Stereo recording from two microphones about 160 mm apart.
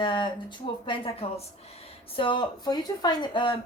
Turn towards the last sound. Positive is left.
turn(degrees=30)  # may be behind; listen again after turning